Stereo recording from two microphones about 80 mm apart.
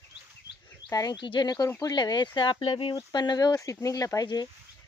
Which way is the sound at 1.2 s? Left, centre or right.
Left.